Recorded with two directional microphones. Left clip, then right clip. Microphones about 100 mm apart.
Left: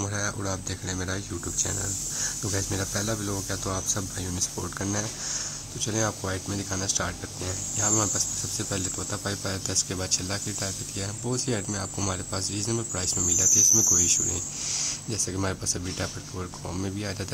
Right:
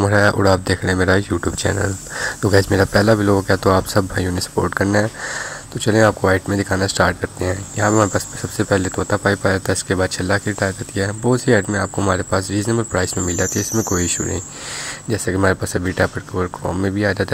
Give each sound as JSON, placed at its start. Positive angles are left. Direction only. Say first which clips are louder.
{"t": 0.1, "sound": "speech", "louder": "right 17 dB", "side_deg": -85}
{"t": 0.9, "sound": "speech", "louder": "right 18 dB", "side_deg": -65}